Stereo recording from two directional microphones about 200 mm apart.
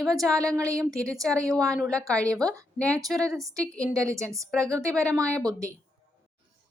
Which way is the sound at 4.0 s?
15° right (ahead or behind).